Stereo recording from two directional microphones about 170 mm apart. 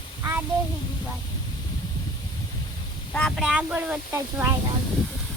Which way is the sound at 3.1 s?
5° left (ahead or behind).